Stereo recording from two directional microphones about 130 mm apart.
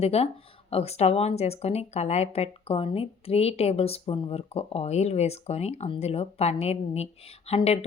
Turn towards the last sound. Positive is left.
turn(degrees=55)  # may be behind; listen again after turning